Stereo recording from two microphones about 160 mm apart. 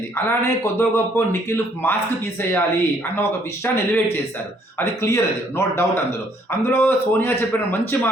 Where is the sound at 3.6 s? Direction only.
10° left (ahead or behind).